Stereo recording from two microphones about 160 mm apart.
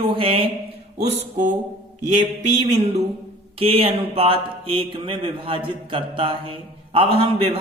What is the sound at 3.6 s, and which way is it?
Speech, 35° right (ahead or behind).